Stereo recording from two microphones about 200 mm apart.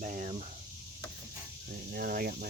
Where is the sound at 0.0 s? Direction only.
45° right (ahead or behind).